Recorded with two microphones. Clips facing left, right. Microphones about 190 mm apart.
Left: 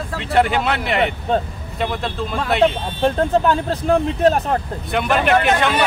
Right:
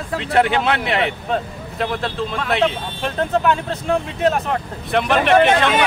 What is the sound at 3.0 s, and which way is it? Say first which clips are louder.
Speech: left 2 dB; 35° left (ahead or behind).